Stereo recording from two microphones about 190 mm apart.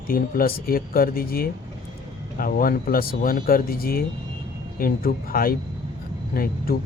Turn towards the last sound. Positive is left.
turn(degrees=50)  # may be behind; listen again after turning